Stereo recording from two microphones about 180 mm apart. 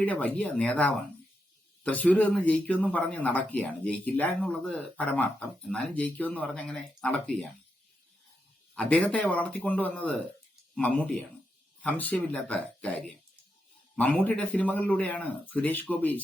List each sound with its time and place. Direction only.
0.0 s speech: 10° left (ahead or behind)
8.7 s speech: 5° left (ahead or behind)